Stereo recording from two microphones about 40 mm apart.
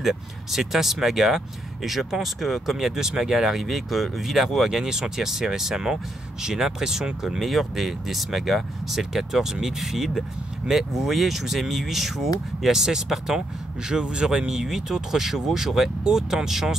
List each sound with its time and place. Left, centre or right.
0.0 s speech: centre
7.2 s speech: centre